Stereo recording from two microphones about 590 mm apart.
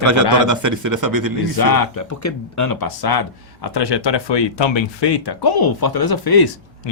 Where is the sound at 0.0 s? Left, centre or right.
Right.